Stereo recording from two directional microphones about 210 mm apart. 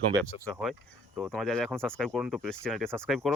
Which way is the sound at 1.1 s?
Centre (ahead or behind).